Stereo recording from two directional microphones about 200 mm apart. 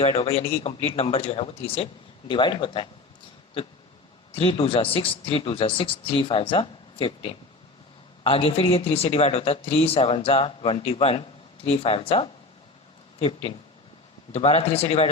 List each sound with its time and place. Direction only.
0.0 s speech: 30° left (ahead or behind)
4.3 s a man's voice: 30° left (ahead or behind)